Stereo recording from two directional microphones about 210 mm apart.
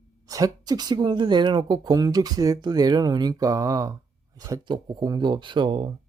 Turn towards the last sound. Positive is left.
turn(degrees=-20)  # may be behind; listen again after turning